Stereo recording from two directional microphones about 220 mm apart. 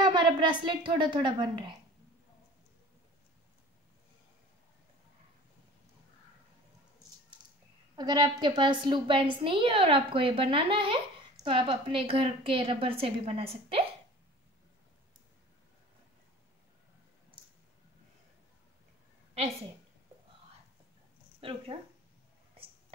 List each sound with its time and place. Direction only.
0.0 s a woman's voice: 20° right (ahead or behind)
7.9 s a woman's voice: 20° right (ahead or behind)
21.4 s speech: 25° right (ahead or behind)